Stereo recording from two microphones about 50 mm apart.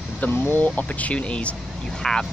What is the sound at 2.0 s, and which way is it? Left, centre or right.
Speech, centre.